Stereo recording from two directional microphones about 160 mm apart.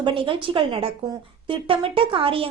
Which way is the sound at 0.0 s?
30° right (ahead or behind).